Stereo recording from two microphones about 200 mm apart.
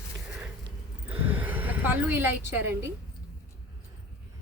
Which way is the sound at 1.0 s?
10° right (ahead or behind).